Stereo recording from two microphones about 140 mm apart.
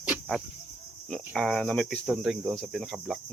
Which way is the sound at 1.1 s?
5° left (ahead or behind).